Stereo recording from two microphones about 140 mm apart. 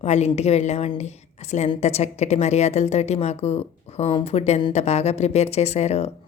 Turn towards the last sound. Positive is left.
turn(degrees=50)  # may be behind; listen again after turning